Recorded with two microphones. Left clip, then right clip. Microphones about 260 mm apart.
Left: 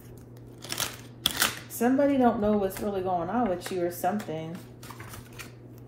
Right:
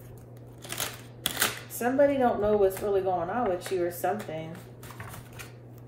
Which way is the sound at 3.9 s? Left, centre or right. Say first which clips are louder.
Left 1 dB; left.